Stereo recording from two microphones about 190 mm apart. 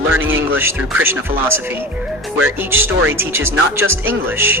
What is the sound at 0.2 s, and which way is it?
Music, 90° right.